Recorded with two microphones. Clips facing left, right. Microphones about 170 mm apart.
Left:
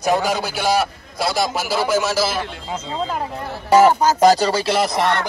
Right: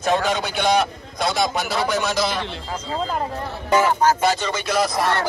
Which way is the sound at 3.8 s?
40° left (ahead or behind).